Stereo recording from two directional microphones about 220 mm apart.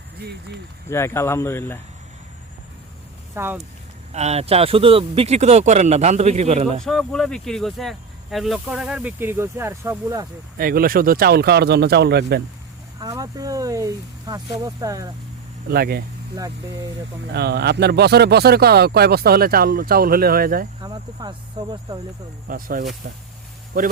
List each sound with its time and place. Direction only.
0.2 s speech: 50° right (ahead or behind)
0.9 s speech: 10° left (ahead or behind)
3.3 s speech: 10° right (ahead or behind)
4.1 s speech: 30° right (ahead or behind)
6.8 s speech: centre (ahead or behind)
10.6 s speech: 40° right (ahead or behind)
13.0 s speech: 15° right (ahead or behind)
15.7 s speech: 45° right (ahead or behind)
17.3 s speech: 50° right (ahead or behind)
20.8 s speech: 20° right (ahead or behind)
22.4 s speech: 40° right (ahead or behind)